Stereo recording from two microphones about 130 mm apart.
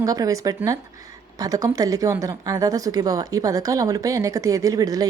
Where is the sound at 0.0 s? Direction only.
25° right (ahead or behind).